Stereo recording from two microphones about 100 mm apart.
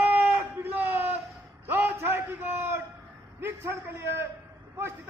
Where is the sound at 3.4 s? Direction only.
25° right (ahead or behind).